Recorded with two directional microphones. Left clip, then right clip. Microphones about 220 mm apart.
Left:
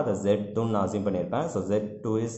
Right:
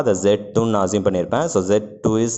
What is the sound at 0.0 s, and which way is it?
Speech, 40° right (ahead or behind).